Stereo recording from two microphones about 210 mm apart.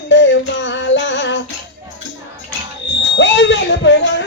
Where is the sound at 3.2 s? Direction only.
60° left (ahead or behind).